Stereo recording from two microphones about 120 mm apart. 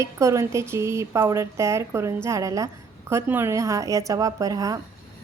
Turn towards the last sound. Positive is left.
turn(degrees=-30)  # may be behind; listen again after turning